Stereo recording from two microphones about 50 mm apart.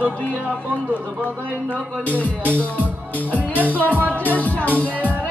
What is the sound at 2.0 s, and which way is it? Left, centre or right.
Speech, left.